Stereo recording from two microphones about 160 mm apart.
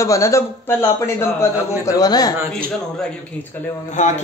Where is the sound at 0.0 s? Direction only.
20° left (ahead or behind).